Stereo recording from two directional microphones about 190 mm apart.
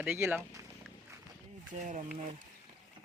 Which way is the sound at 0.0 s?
10° right (ahead or behind).